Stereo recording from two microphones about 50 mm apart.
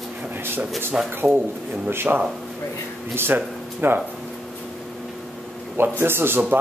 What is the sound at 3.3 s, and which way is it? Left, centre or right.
Speech, right.